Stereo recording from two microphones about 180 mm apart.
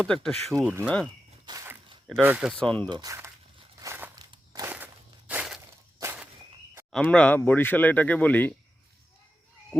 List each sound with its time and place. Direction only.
0.0 s speech: 5° left (ahead or behind)
0.6 s speech: 10° right (ahead or behind)
1.5 s a sound: 20° right (ahead or behind)
2.2 s speech: 10° right (ahead or behind)
2.5 s speech: 5° left (ahead or behind)
2.9 s speech: 20° right (ahead or behind)
3.8 s a sound: 15° right (ahead or behind)
4.1 s walk: 20° right (ahead or behind)
5.3 s crushing: 5° right (ahead or behind)
6.0 s walk: 10° right (ahead or behind)
6.9 s speech: 5° left (ahead or behind)